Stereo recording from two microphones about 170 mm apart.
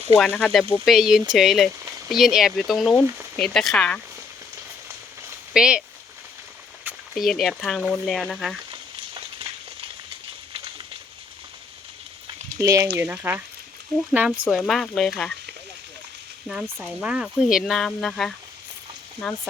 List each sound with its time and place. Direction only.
0.2 s speech: 5° left (ahead or behind)
5.5 s speech: 5° right (ahead or behind)
6.8 s speech: centre (ahead or behind)
12.5 s speech: 20° right (ahead or behind); by 15.3 s centre (ahead or behind)
16.5 s speech: 5° right (ahead or behind)